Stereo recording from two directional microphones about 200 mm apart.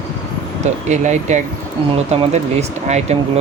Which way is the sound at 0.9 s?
35° right (ahead or behind).